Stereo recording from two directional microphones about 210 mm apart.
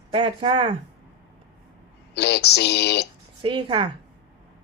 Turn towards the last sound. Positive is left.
turn(degrees=-25)  # may be behind; listen again after turning